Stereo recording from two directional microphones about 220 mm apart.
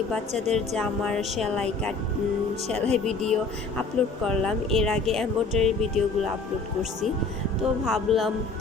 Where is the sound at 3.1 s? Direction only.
5° left (ahead or behind).